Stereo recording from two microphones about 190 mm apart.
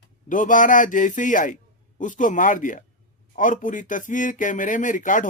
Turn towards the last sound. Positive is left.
turn(degrees=45)  # may be behind; listen again after turning